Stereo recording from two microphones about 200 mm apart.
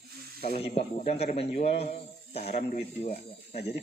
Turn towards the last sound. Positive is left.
turn(degrees=30)  # may be behind; listen again after turning